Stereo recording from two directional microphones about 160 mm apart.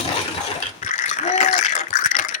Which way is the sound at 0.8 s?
50° left (ahead or behind).